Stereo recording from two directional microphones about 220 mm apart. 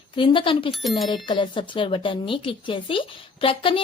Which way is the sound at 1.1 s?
20° left (ahead or behind).